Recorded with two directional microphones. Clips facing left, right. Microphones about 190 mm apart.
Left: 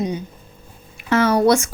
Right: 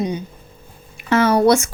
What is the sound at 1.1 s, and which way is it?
Speech, 25° right (ahead or behind).